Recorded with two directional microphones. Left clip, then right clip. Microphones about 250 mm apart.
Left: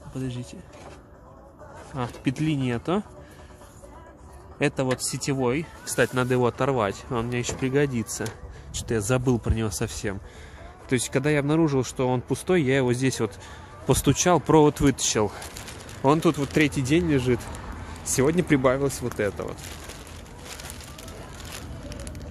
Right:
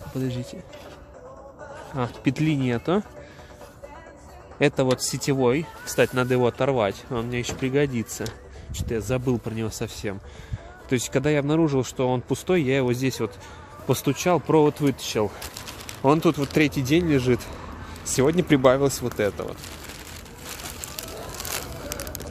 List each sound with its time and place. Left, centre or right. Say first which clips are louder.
0.2 s speech: right 4 dB; centre
2.0 s speech: right 3 dB; centre
4.6 s speech: right 4 dB; centre
10.9 s speech: right 1 dB; centre
21.8 s a sound: right 6 dB; right